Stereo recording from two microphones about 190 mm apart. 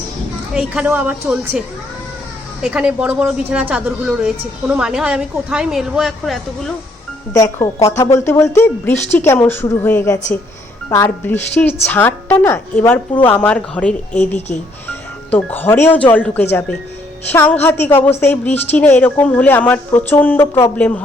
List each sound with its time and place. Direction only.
0.5 s a woman's voice: 5° right (ahead or behind)
7.3 s a woman's voice: 15° left (ahead or behind)
14.3 s speech: 35° left (ahead or behind)
15.3 s a woman's voice: 10° left (ahead or behind)